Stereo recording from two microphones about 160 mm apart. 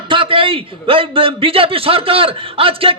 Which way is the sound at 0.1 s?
30° right (ahead or behind).